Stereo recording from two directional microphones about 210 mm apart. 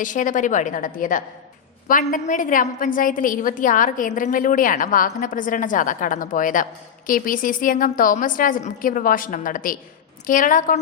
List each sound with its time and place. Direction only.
0.0 s a woman's voice: 40° left (ahead or behind)